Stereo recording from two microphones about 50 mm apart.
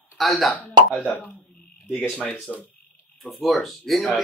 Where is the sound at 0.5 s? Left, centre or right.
Left.